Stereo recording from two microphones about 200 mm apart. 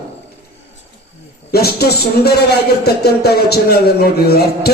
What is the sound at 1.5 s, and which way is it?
Speech, 50° left (ahead or behind).